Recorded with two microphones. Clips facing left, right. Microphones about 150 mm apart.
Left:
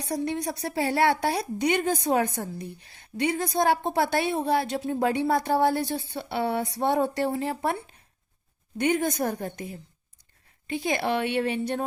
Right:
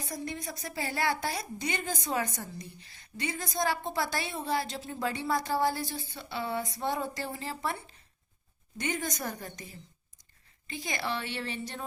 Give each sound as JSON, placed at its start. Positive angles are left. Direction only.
{"t": 0.0, "sound": "a woman's voice", "side_deg": 70}